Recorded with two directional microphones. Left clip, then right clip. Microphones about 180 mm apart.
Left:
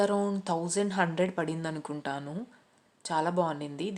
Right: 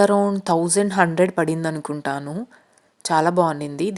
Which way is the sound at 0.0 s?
40° right (ahead or behind).